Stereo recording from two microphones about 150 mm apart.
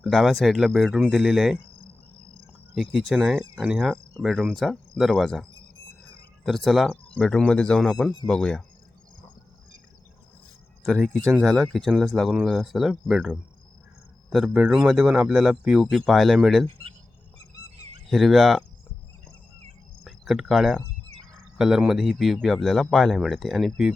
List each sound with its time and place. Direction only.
0.0 s speech: centre (ahead or behind)
2.7 s speech: centre (ahead or behind)
10.8 s speech: centre (ahead or behind)
16.6 s speech: 40° right (ahead or behind)
18.1 s speech: centre (ahead or behind)
20.1 s speech: centre (ahead or behind)